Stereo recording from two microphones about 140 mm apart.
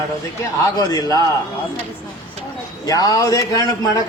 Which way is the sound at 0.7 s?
25° left (ahead or behind).